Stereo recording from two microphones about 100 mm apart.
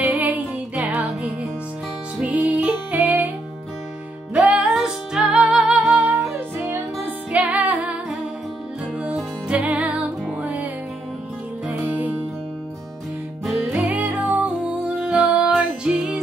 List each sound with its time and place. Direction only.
0.0 s music: 15° right (ahead or behind)
2.1 s music: 10° right (ahead or behind)
4.3 s music: 15° right (ahead or behind)
7.3 s music: 15° right (ahead or behind)
13.8 s music: 15° right (ahead or behind)